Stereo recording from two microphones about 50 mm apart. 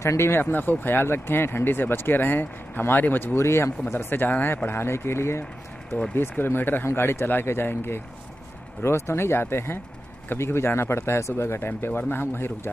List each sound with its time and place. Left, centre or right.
0.0 s speech: left
0.3 s speech: left
3.3 s speech: left
3.8 s speech: left
4.6 s speech: left
6.1 s speech: left
8.8 s speech: left